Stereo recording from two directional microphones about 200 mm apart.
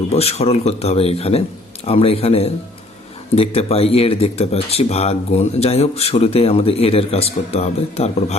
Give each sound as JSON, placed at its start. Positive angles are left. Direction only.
{"t": 0.1, "sound": "a man's voice", "side_deg": 30}